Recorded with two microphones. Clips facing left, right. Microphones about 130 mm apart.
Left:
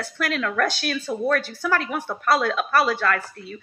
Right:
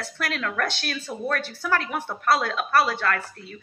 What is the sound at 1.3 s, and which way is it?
A woman's voice, 30° right (ahead or behind).